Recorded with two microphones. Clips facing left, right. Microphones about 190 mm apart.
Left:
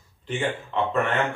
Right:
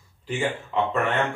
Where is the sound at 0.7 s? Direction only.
5° right (ahead or behind).